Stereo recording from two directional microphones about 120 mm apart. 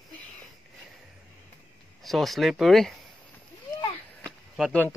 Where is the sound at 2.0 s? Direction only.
Centre (ahead or behind).